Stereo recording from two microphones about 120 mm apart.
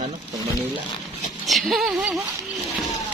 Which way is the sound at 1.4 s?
Centre (ahead or behind).